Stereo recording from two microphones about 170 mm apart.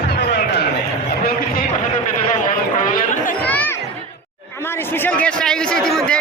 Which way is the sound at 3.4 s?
10° left (ahead or behind).